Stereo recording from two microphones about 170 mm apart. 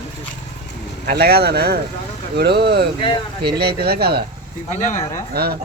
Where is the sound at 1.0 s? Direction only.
65° right (ahead or behind).